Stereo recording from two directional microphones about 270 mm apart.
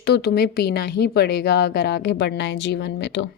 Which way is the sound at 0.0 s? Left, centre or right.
Left.